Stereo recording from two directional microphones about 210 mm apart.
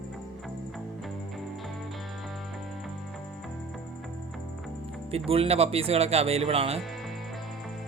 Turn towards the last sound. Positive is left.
turn(degrees=-30)  # may be behind; listen again after turning